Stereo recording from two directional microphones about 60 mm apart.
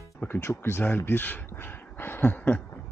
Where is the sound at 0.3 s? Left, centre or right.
Left.